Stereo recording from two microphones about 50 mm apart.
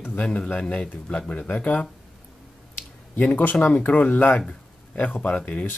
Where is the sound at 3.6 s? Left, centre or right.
Left.